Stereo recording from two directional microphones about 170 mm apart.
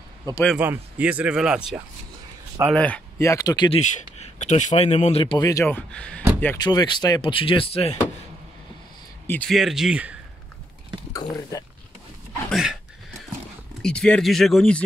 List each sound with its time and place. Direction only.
0.6 s speech: 10° right (ahead or behind)
2.7 s speech: 10° left (ahead or behind); by 3.8 s 25° left (ahead or behind)
3.8 s speech: 45° left (ahead or behind)
5.4 s speech: 20° left (ahead or behind)
5.7 s speech: 10° left (ahead or behind)
6.6 s speech: 25° left (ahead or behind)
9.3 s speech: 5° left (ahead or behind)
11.1 s speech: 20° left (ahead or behind)
12.4 s speech: 5° right (ahead or behind)
13.8 s speech: 5° left (ahead or behind)